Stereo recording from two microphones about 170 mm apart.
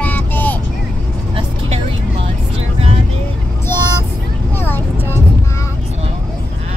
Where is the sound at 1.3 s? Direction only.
35° right (ahead or behind).